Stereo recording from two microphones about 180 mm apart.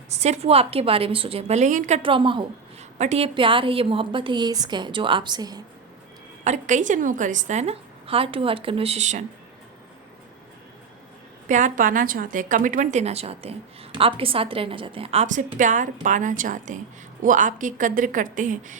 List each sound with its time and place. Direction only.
0.1 s a woman's voice: 35° right (ahead or behind)
2.0 s a woman's voice: 30° right (ahead or behind)
6.4 s a woman's voice: 40° right (ahead or behind)
11.4 s a woman's voice: 45° right (ahead or behind)